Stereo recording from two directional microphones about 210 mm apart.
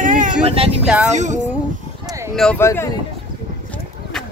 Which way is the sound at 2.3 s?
Centre (ahead or behind).